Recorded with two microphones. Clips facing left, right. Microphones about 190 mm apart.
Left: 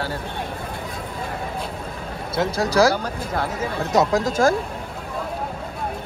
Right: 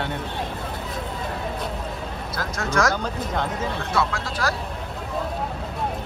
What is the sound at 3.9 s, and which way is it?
Speech, 40° left (ahead or behind).